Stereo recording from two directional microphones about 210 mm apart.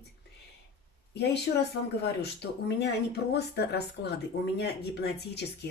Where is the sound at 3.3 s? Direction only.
50° left (ahead or behind).